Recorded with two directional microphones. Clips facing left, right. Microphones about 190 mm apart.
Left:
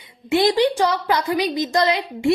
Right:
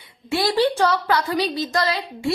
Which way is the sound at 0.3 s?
20° left (ahead or behind).